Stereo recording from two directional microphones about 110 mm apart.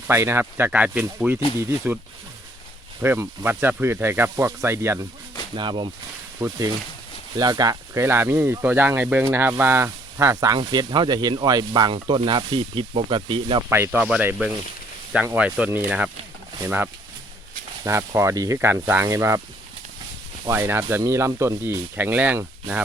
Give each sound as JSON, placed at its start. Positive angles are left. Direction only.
{"t": 0.1, "sound": "speech", "side_deg": -20}
{"t": 3.0, "sound": "speech", "side_deg": -20}
{"t": 5.5, "sound": "speech", "side_deg": -45}
{"t": 6.4, "sound": "speech", "side_deg": -30}
{"t": 10.6, "sound": "speech", "side_deg": -45}
{"t": 13.7, "sound": "speech", "side_deg": -20}
{"t": 15.4, "sound": "speech", "side_deg": -10}
{"t": 20.5, "sound": "speech", "side_deg": -20}